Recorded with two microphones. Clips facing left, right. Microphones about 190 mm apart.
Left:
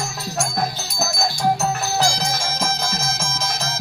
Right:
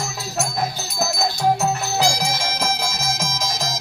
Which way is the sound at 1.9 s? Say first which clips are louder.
Right 1 dB; 15° right (ahead or behind).